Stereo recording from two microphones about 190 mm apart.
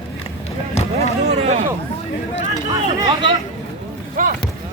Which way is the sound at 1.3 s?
35° right (ahead or behind).